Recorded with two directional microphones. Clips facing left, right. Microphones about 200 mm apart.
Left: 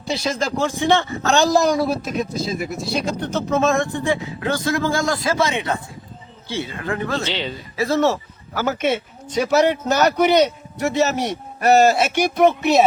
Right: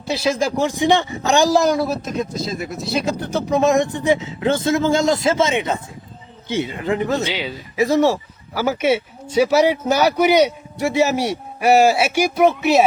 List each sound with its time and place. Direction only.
0.1 s speech: 5° right (ahead or behind)